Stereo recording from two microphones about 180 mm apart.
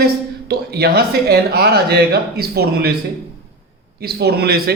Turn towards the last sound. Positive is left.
turn(degrees=-60)  # may be behind; listen again after turning